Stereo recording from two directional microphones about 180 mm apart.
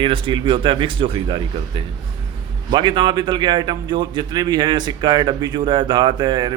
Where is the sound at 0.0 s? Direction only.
30° right (ahead or behind).